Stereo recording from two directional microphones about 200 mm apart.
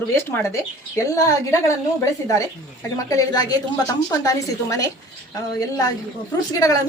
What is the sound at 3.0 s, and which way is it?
A woman's voice, 20° left (ahead or behind).